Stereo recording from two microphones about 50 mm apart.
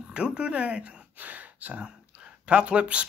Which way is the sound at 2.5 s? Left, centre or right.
Right.